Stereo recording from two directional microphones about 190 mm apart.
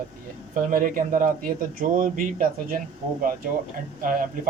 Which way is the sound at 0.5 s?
50° right (ahead or behind).